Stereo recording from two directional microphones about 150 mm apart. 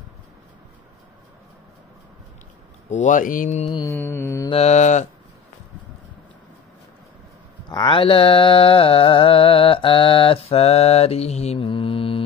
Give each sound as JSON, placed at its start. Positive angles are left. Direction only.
{"t": 2.9, "sound": "mantra", "side_deg": 55}
{"t": 3.9, "sound": "mantra", "side_deg": 15}
{"t": 4.5, "sound": "mantra", "side_deg": 45}
{"t": 7.7, "sound": "mantra", "side_deg": 30}